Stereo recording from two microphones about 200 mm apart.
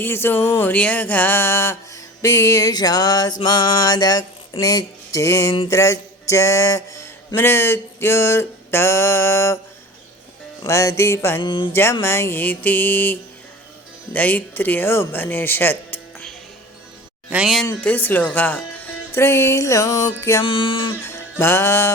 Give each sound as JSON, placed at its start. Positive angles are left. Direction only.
{"t": 0.0, "sound": "speech", "side_deg": 10}
{"t": 2.2, "sound": "music", "side_deg": 15}
{"t": 4.6, "sound": "speech", "side_deg": 15}
{"t": 5.6, "sound": "a sound", "side_deg": 15}
{"t": 10.7, "sound": "speech", "side_deg": 15}
{"t": 11.4, "sound": "music", "side_deg": 25}
{"t": 11.7, "sound": "speech", "side_deg": 10}
{"t": 17.2, "sound": "speech", "side_deg": -5}
{"t": 17.7, "sound": "speech", "side_deg": 10}
{"t": 20.4, "sound": "music", "side_deg": 25}
{"t": 21.0, "sound": "music", "side_deg": 10}